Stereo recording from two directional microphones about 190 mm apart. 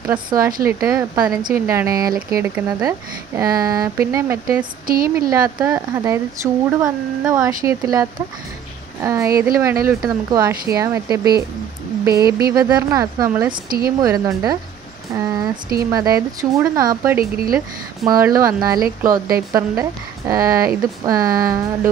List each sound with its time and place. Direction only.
0.7 s speech: 20° right (ahead or behind)
4.8 s speech: 50° right (ahead or behind)
5.3 s speech: 15° right (ahead or behind)
12.3 s speech: 55° right (ahead or behind)
12.5 s speech: 20° right (ahead or behind)
13.7 s speech: 50° right (ahead or behind)
14.0 s speech: 20° right (ahead or behind)
15.1 s a sound: 20° right (ahead or behind)
15.9 s speech: 20° right (ahead or behind)